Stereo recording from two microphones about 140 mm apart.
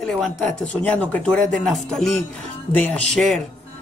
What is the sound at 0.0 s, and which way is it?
A man's voice, centre (ahead or behind).